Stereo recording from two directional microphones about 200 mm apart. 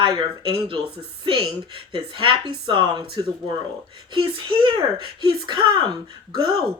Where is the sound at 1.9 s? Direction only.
25° right (ahead or behind).